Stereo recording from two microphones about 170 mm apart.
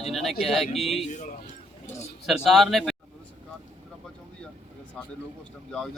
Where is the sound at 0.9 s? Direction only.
40° left (ahead or behind).